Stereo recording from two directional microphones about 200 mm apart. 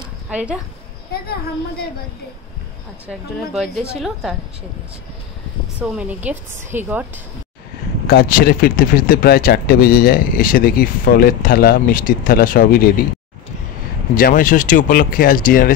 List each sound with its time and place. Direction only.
0.3 s speech: 5° right (ahead or behind)
1.1 s speech: 50° left (ahead or behind)
3.7 s a woman's voice: 5° right (ahead or behind)
5.8 s a woman's voice: 5° right (ahead or behind)
8.1 s speech: 50° left (ahead or behind)
14.1 s speech: 45° left (ahead or behind)